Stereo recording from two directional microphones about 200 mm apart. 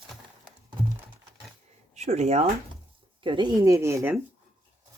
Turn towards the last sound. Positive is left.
turn(degrees=-10)  # may be behind; listen again after turning